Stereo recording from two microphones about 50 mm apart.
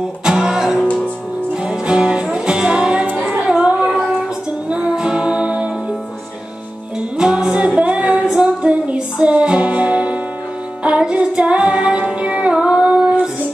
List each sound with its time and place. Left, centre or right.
0.2 s music: centre
0.8 s music: left
1.5 s music: centre
3.1 s music: right
3.4 s child singing: right
4.6 s music: right
7.2 s a capella: centre
8.4 s music: right